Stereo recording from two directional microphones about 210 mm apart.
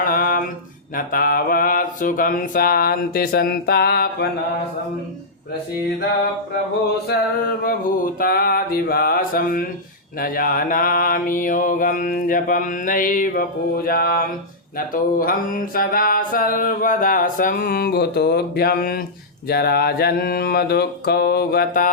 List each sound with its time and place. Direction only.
0.0 s a sound: 45° left (ahead or behind)
0.9 s music: 45° left (ahead or behind)
7.1 s music: 50° left (ahead or behind)
10.2 s mantra: 45° left (ahead or behind)
14.9 s music: 40° left (ahead or behind)